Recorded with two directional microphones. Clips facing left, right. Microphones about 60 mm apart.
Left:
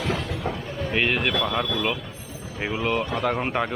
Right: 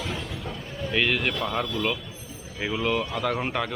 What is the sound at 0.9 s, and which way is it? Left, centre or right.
Speech, centre.